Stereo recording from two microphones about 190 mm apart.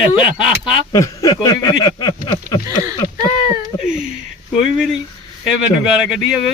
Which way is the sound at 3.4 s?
15° right (ahead or behind).